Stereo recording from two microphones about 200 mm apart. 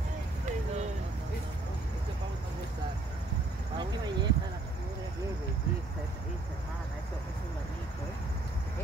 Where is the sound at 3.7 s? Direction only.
20° right (ahead or behind).